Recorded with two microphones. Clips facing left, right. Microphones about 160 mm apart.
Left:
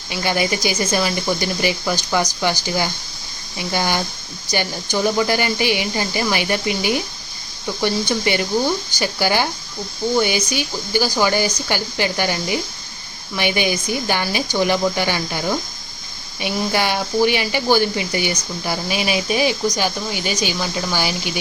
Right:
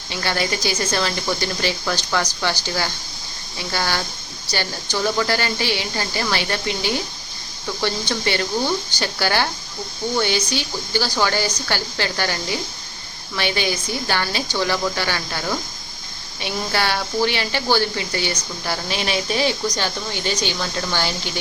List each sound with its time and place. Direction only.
0.1 s speech: 15° left (ahead or behind)